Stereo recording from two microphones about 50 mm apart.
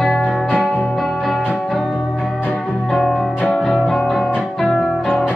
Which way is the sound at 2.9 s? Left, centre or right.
Centre.